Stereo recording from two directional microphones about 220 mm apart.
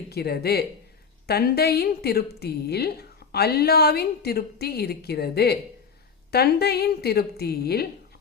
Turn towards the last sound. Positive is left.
turn(degrees=45)  # may be behind; listen again after turning